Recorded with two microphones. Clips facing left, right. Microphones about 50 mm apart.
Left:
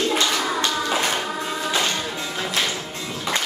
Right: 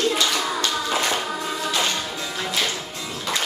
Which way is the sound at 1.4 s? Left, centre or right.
Centre.